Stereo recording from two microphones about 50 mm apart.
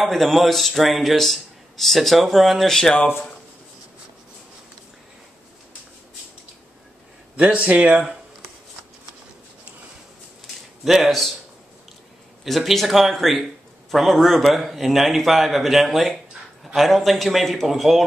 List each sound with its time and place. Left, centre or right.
0.0 s a man's voice: centre
7.3 s a man's voice: right
10.8 s a man's voice: centre
12.4 s a man's voice: centre